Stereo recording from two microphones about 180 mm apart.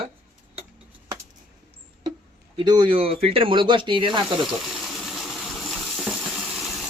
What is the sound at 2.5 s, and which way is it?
Speech, 25° right (ahead or behind).